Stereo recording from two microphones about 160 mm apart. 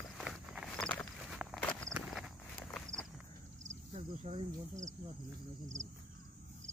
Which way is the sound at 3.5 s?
45° right (ahead or behind).